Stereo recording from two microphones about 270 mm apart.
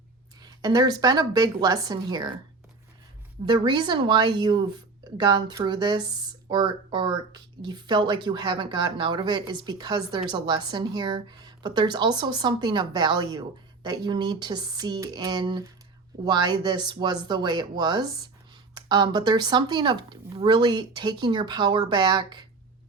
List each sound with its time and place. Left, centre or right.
0.4 s speech: centre
3.4 s speech: centre